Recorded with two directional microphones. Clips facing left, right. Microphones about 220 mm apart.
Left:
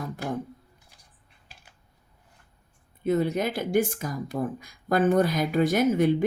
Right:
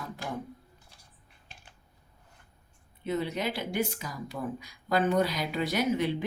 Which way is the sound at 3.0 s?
45° left (ahead or behind).